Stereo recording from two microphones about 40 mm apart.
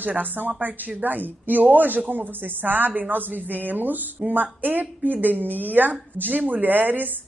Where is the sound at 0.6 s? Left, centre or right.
Right.